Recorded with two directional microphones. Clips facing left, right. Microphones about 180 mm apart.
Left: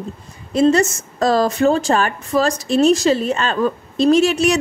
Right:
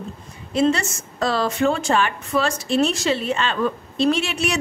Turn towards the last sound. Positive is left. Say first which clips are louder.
# left 8 dB
turn(degrees=40)  # may be behind; listen again after turning